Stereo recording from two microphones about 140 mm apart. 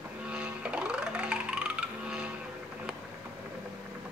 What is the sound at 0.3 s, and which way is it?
Music, 10° right (ahead or behind).